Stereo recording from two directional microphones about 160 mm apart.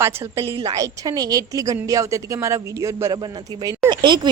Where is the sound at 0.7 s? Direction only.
20° right (ahead or behind).